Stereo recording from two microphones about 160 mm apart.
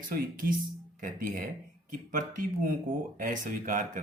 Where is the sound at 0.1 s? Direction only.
60° right (ahead or behind).